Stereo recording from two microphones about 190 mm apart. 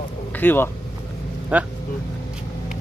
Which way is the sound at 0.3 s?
10° left (ahead or behind).